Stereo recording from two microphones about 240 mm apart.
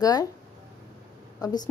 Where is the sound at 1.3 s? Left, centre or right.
Centre.